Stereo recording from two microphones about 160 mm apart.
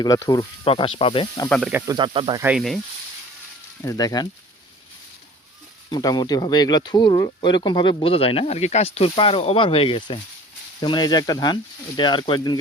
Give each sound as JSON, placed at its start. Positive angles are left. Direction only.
{"t": 0.0, "sound": "speech", "side_deg": 25}
{"t": 0.7, "sound": "speech", "side_deg": 35}
{"t": 1.5, "sound": "speech", "side_deg": 5}
{"t": 1.9, "sound": "speech", "side_deg": -30}
{"t": 2.4, "sound": "speech", "side_deg": -5}
{"t": 3.8, "sound": "speech", "side_deg": 25}
{"t": 5.9, "sound": "speech", "side_deg": 25}